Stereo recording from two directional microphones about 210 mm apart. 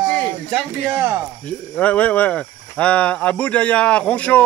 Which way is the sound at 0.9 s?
10° right (ahead or behind).